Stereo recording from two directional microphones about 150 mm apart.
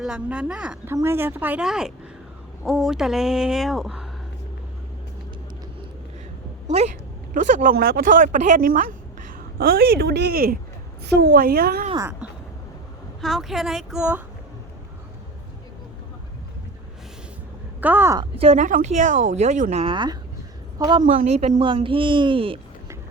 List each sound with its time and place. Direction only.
0.0 s speech: 5° right (ahead or behind)
6.7 s speech: 45° right (ahead or behind)
7.3 s speech: 60° right (ahead or behind)
9.6 s speech: 90° right
13.2 s speech: centre (ahead or behind)
17.7 s speech: 15° right (ahead or behind)
18.2 s a woman's voice: 40° right (ahead or behind)
18.6 s speech: 55° right (ahead or behind)
19.8 s a woman's voice: 30° right (ahead or behind)
21.0 s speech: 55° right (ahead or behind)
21.5 s a woman's voice: 35° right (ahead or behind)